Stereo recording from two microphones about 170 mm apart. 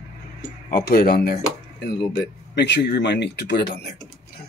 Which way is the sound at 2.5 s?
85° left.